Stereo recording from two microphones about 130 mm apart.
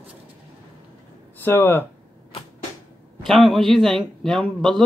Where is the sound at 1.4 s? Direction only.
15° left (ahead or behind).